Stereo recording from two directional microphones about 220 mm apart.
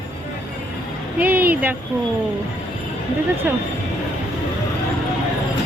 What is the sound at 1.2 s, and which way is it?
Speech, 5° right (ahead or behind).